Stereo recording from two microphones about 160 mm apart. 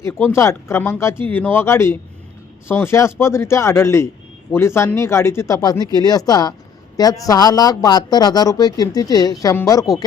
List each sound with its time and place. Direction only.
0.1 s a man's voice: 15° left (ahead or behind)